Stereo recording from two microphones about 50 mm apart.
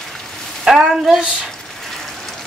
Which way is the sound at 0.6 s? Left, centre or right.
Centre.